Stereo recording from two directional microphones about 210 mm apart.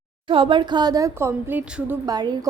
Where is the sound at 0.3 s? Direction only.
25° right (ahead or behind).